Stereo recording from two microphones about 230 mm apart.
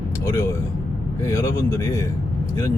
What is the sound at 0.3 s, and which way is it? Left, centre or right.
Speech, centre.